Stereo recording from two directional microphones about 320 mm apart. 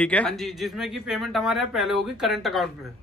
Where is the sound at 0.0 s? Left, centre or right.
Centre.